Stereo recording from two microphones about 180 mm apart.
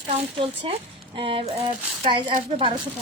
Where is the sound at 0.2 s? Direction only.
30° right (ahead or behind).